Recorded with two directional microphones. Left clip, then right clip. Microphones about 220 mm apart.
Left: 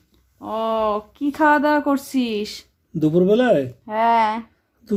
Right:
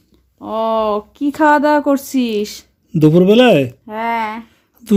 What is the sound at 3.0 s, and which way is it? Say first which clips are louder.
Speech: right 7 dB; 40° right (ahead or behind).